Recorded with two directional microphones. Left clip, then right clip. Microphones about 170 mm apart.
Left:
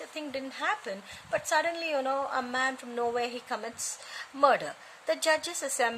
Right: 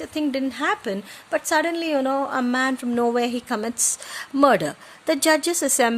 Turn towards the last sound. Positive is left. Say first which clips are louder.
# right 9 dB
turn(degrees=-40)  # may be behind; listen again after turning